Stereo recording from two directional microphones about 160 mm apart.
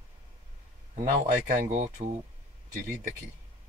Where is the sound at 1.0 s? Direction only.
50° right (ahead or behind).